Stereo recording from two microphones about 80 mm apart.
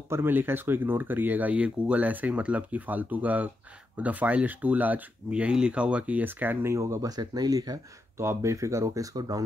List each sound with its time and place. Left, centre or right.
0.1 s speech: right
8.2 s speech: right